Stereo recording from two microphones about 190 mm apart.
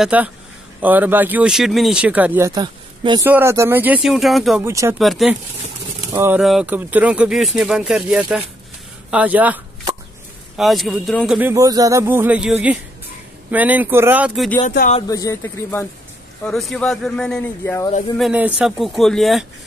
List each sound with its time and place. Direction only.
0.0 s speech: 5° right (ahead or behind); by 3.3 s 25° right (ahead or behind)
3.3 s speech: 10° right (ahead or behind)
4.6 s speech: 15° right (ahead or behind)
4.9 s speech: centre (ahead or behind)
6.1 s speech: 10° right (ahead or behind)
10.6 s speech: centre (ahead or behind)
15.0 s speech: 15° left (ahead or behind)
16.4 s speech: centre (ahead or behind)
18.1 s speech: 5° right (ahead or behind)